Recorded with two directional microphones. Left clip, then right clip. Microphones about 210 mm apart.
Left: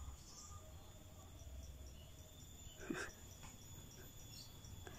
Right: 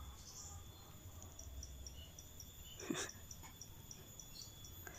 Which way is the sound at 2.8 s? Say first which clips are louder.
Right 2 dB; 5° left (ahead or behind).